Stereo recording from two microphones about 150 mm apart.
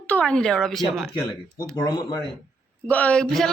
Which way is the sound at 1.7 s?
25° left (ahead or behind).